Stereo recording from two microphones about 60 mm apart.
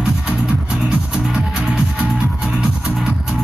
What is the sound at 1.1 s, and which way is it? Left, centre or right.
Music, centre.